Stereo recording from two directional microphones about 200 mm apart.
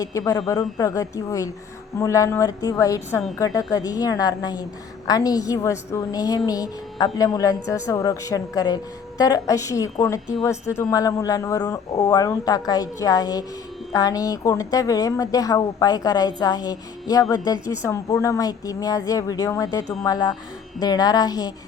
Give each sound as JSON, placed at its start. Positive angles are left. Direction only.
{"t": 0.0, "sound": "a woman's voice", "side_deg": 15}